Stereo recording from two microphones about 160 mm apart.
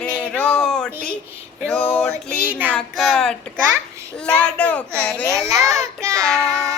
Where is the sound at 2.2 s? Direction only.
10° left (ahead or behind).